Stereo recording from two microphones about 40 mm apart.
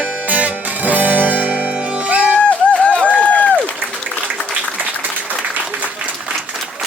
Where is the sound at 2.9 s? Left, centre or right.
Left.